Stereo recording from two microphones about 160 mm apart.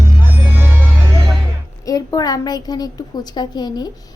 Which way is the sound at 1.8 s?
25° left (ahead or behind).